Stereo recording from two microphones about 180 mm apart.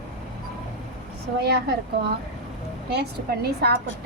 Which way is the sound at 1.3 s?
65° right (ahead or behind).